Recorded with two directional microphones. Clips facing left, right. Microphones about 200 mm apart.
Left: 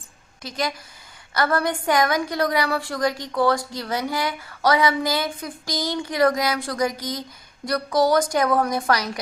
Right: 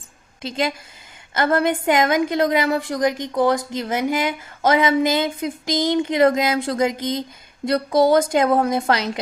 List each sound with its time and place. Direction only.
0.4 s a woman's voice: 25° right (ahead or behind)